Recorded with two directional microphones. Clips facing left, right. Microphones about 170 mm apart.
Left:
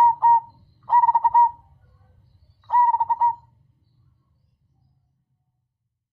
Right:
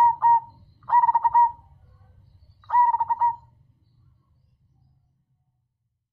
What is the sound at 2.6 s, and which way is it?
Bird, 20° left (ahead or behind).